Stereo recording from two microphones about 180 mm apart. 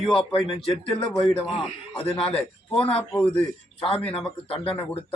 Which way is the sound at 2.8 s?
30° left (ahead or behind).